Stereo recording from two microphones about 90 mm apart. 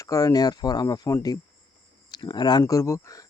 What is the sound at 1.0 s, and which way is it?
Speech, 40° left (ahead or behind).